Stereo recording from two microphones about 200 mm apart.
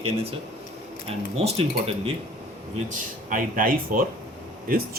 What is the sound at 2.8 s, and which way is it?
Speech, 40° right (ahead or behind).